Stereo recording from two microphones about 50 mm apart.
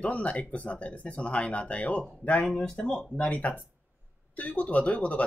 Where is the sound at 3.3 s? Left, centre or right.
Left.